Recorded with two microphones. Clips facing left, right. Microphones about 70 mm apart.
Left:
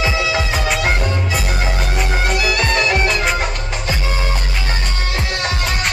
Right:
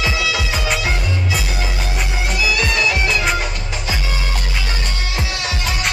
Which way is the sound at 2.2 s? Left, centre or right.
Left.